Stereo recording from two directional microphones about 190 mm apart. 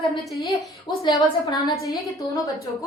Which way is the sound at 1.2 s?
20° left (ahead or behind).